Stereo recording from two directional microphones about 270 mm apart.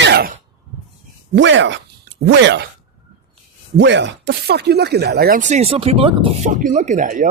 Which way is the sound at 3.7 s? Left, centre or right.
Right.